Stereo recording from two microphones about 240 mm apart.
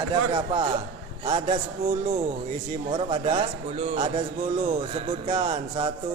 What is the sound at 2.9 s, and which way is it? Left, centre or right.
Speech, right.